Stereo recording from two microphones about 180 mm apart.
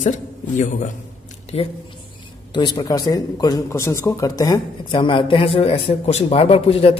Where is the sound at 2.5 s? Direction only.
25° left (ahead or behind).